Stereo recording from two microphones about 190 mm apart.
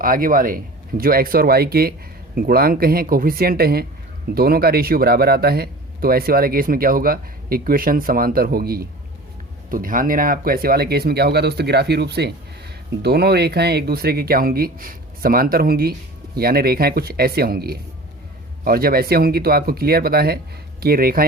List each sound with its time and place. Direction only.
0.0 s speech: 50° right (ahead or behind)